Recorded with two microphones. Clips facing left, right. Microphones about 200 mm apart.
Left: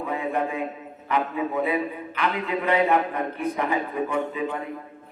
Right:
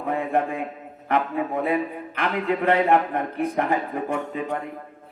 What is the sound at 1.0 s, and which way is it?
Speech, 55° right (ahead or behind).